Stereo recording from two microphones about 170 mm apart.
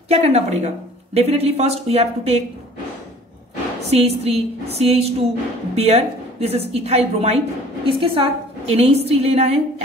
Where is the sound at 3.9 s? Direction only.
35° right (ahead or behind).